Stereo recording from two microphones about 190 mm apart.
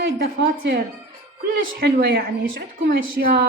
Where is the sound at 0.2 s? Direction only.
60° right (ahead or behind).